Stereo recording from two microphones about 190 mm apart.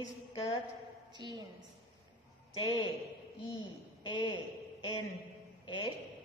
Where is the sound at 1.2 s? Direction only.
20° right (ahead or behind).